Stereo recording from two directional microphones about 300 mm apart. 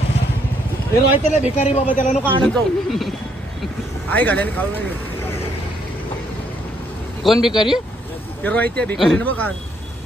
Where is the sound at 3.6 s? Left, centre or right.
Centre.